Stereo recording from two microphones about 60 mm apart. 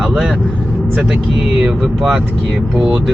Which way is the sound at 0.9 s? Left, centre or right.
Centre.